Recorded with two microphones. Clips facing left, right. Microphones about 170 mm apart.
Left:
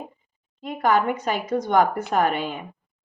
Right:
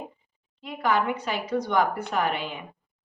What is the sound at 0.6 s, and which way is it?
A woman's voice, 45° left (ahead or behind).